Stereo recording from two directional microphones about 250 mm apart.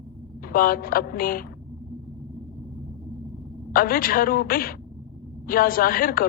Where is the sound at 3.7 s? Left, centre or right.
Left.